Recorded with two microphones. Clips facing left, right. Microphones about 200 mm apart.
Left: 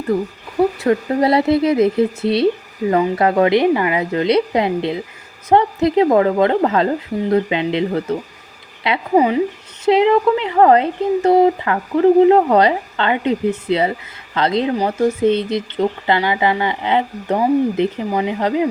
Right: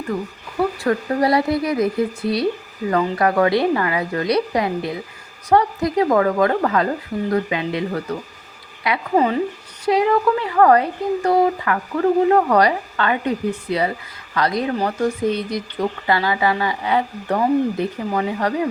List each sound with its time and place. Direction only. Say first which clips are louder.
0.1 s speech: left 7 dB; 35° left (ahead or behind)
0.8 s speech: left 3 dB; 25° left (ahead or behind)
9.1 s speech: left 4 dB; 15° left (ahead or behind)